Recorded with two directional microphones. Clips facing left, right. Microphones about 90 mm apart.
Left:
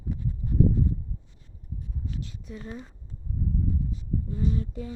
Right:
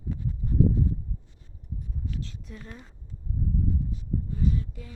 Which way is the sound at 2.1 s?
15° left (ahead or behind).